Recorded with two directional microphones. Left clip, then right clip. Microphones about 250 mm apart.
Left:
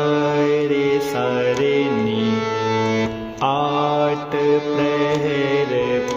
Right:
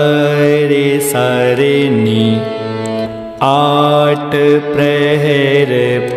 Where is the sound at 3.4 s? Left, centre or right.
Right.